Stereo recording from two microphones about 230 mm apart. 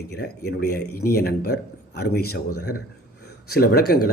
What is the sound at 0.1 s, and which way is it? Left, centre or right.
A man's voice, left.